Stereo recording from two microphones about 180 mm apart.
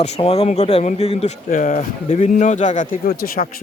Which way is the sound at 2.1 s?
35° left (ahead or behind).